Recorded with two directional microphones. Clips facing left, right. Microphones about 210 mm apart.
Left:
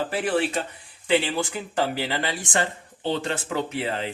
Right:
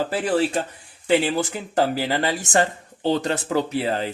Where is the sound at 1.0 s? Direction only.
40° right (ahead or behind).